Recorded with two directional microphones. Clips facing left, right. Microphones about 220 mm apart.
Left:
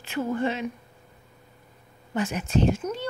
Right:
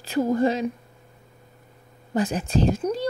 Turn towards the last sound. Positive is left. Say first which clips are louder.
# right 2 dB
turn(degrees=-35)  # may be behind; listen again after turning